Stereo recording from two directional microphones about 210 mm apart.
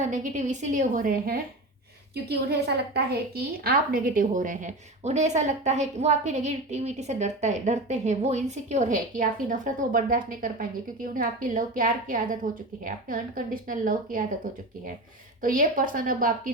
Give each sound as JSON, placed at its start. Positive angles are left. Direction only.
{"t": 0.1, "sound": "a woman's voice", "side_deg": -35}
{"t": 15.4, "sound": "a woman's voice", "side_deg": -40}